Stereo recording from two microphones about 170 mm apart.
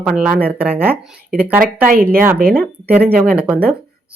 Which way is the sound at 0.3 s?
65° right (ahead or behind).